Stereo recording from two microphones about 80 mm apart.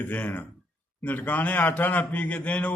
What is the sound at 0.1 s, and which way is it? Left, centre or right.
A man's voice, left.